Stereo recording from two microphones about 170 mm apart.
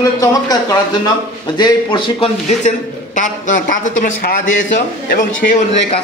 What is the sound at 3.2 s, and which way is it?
A man's voice, 50° left (ahead or behind).